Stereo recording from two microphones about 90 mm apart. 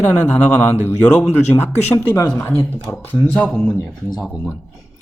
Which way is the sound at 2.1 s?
35° left (ahead or behind).